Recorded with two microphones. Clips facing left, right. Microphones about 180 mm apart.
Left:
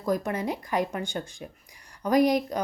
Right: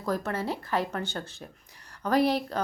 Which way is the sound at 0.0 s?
15° left (ahead or behind).